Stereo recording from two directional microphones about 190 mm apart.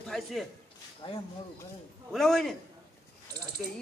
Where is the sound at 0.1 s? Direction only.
Centre (ahead or behind).